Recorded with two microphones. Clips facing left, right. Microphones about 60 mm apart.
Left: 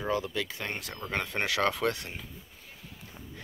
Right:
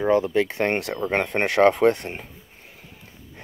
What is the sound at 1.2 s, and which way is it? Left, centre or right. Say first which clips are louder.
Speech: right 11 dB; right.